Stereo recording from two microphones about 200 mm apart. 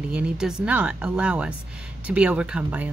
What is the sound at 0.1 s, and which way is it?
A woman's voice, 5° right (ahead or behind).